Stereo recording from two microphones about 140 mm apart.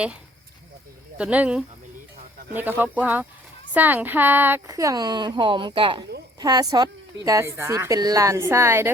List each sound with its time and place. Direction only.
1.2 s a woman's voice: 10° right (ahead or behind)